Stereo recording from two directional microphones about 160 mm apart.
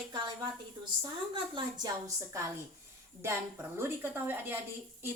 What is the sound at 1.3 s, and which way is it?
A woman's voice, 30° right (ahead or behind).